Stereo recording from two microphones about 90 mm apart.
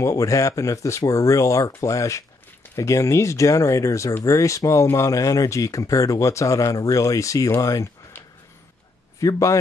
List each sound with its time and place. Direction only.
0.0 s speech: 35° left (ahead or behind)
9.2 s speech: 35° left (ahead or behind)